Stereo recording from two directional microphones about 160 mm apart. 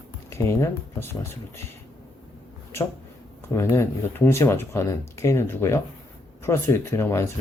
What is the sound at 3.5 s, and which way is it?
Speech, 15° left (ahead or behind).